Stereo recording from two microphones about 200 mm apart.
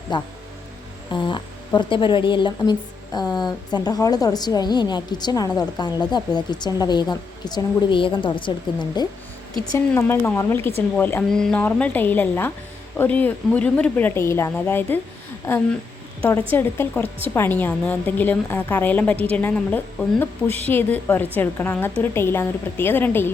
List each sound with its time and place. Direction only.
0.1 s a woman's voice: 20° left (ahead or behind)
9.7 s a woman's voice: 10° left (ahead or behind)